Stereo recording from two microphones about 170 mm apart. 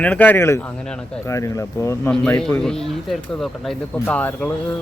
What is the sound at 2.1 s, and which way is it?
Speech, 5° left (ahead or behind).